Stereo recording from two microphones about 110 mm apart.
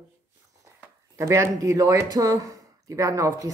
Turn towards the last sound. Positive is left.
turn(degrees=-30)  # may be behind; listen again after turning